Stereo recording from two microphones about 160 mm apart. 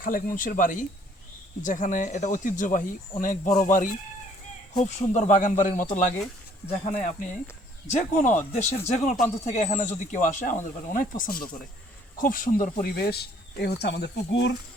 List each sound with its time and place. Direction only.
0.0 s speech: 60° left (ahead or behind); by 14.5 s 90° left